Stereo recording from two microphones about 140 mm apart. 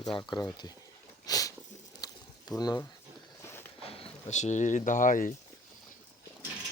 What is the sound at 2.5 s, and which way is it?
Speech, 30° left (ahead or behind).